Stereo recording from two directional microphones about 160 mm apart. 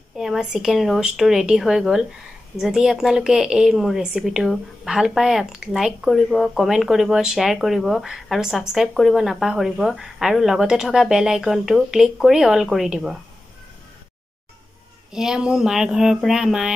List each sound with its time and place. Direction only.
0.2 s a woman's voice: 5° right (ahead or behind)
15.1 s a woman's voice: 5° right (ahead or behind)